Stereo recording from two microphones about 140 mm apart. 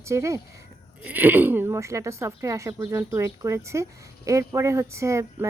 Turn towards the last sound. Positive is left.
turn(degrees=-20)  # may be behind; listen again after turning